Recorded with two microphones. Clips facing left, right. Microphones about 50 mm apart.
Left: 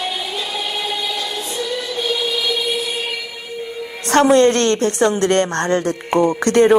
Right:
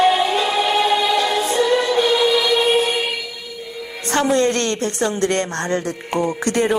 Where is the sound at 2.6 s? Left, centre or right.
Right.